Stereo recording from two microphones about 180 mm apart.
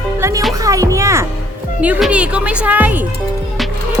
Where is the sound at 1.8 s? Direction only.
5° right (ahead or behind).